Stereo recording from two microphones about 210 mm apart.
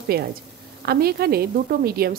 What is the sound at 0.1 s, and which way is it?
A woman's voice, 45° right (ahead or behind).